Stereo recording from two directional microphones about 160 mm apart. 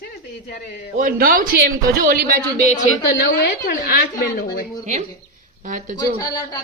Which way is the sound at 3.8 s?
70° left (ahead or behind).